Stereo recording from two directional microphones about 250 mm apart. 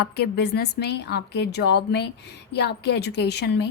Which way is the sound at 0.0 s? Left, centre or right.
Left.